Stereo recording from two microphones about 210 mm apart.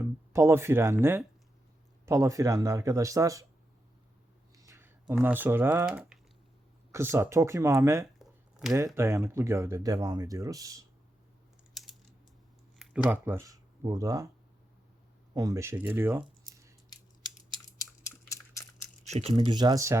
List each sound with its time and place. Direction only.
0.0 s speech: 10° right (ahead or behind)
2.0 s speech: 15° right (ahead or behind)
4.5 s a sound: 15° right (ahead or behind)
6.9 s speech: 10° right (ahead or behind)
8.2 s a sound: centre (ahead or behind)
9.0 s speech: 15° right (ahead or behind)
11.7 s typing: centre (ahead or behind)
12.8 s speech: 5° right (ahead or behind)
15.4 s speech: 15° right (ahead or behind)
17.7 s a sound: 15° left (ahead or behind)
19.0 s speech: 30° right (ahead or behind); by 20.0 s 15° right (ahead or behind)